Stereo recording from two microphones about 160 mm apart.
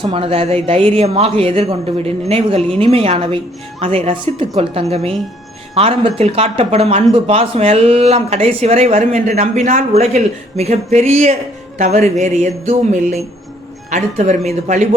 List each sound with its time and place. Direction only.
0.0 s a woman's voice: 35° right (ahead or behind)